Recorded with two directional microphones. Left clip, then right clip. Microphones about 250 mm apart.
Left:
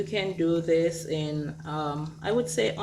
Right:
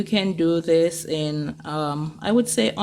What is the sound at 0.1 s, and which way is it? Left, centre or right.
Speech, right.